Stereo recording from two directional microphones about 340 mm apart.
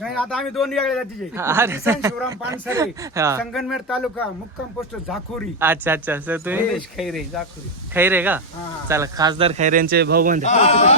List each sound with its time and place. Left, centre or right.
0.0 s a man's voice: centre
5.0 s speech: centre; by 10.4 s right
10.4 s speech: centre